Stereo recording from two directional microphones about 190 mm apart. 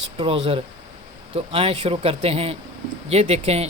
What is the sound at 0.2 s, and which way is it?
Speech, 30° right (ahead or behind).